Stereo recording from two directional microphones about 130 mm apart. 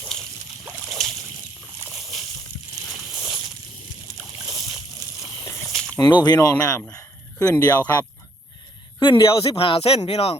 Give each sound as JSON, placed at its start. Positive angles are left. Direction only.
{"t": 0.9, "sound": "boat", "side_deg": 0}
{"t": 2.0, "sound": "slosh", "side_deg": 0}
{"t": 4.2, "sound": "boat", "side_deg": 0}
{"t": 6.0, "sound": "speech", "side_deg": 30}
{"t": 9.0, "sound": "speech", "side_deg": 40}
{"t": 9.5, "sound": "speech", "side_deg": 45}